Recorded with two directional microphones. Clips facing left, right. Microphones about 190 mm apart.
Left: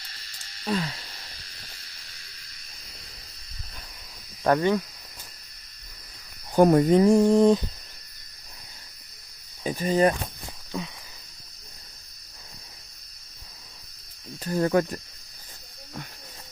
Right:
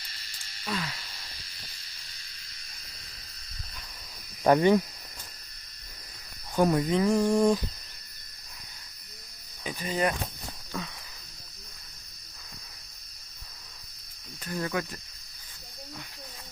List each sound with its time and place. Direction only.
0.6 s speech: 30° left (ahead or behind)
4.4 s speech: 15° right (ahead or behind)
6.6 s speech: 50° left (ahead or behind)
7.0 s a sound: 25° left (ahead or behind)
9.6 s speech: 40° left (ahead or behind)
14.4 s speech: 40° left (ahead or behind)